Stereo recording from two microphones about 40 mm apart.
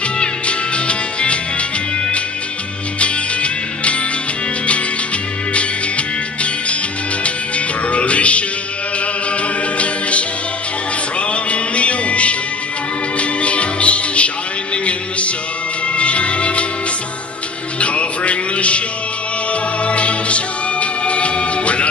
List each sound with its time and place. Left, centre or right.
0.2 s music: left
3.0 s music: left
5.5 s music: left
17.7 s music: left
19.8 s music: left